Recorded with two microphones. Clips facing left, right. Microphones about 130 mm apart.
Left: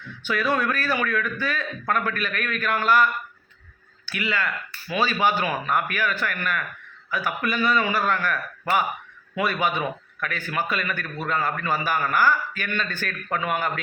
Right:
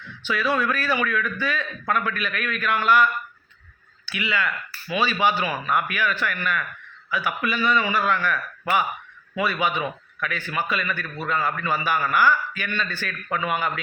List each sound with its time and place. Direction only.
0.3 s a man's voice: 45° left (ahead or behind)